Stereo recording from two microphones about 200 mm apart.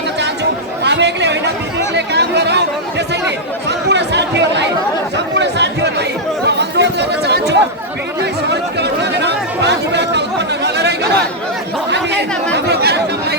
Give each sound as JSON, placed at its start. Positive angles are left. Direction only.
{"t": 0.9, "sound": "chatter", "side_deg": -60}
{"t": 3.7, "sound": "chatter", "side_deg": -60}